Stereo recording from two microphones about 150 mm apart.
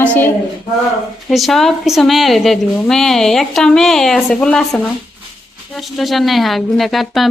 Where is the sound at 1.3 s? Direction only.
Centre (ahead or behind).